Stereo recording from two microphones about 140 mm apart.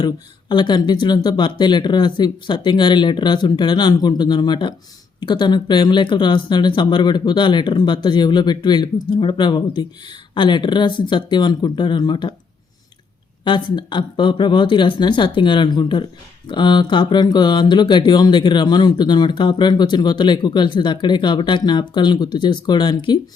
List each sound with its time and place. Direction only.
0.0 s speech: 35° left (ahead or behind)
13.4 s speech: 35° left (ahead or behind)